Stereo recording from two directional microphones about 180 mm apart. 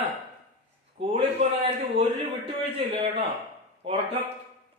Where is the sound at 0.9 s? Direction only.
35° right (ahead or behind).